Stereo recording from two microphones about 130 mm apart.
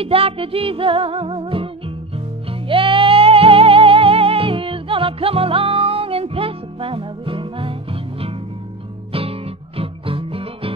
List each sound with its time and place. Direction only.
0.0 s music: 45° right (ahead or behind)